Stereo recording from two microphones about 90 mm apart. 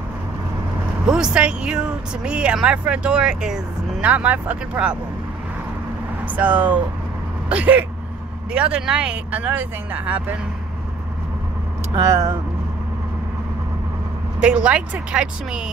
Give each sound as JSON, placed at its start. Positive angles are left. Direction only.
{"t": 1.0, "sound": "speech", "side_deg": -10}
{"t": 6.2, "sound": "speech", "side_deg": -20}
{"t": 11.9, "sound": "speech", "side_deg": -35}
{"t": 14.4, "sound": "speech", "side_deg": -15}